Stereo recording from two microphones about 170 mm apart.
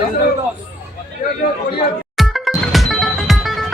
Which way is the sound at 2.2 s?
Centre (ahead or behind).